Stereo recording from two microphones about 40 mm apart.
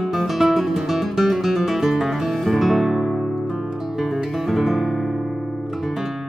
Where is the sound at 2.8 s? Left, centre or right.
Centre.